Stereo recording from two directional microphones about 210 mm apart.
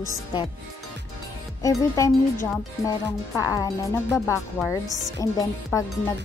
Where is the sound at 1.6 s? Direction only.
15° left (ahead or behind).